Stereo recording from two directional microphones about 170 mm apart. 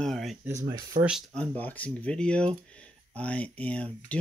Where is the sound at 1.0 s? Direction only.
Centre (ahead or behind).